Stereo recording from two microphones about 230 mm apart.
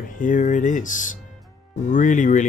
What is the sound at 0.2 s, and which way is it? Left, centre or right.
Speech, left.